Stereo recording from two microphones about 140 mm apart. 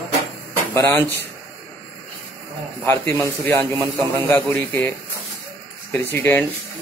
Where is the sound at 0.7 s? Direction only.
15° left (ahead or behind).